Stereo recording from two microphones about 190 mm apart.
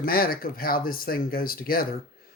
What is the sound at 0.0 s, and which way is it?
Speech, 50° left (ahead or behind).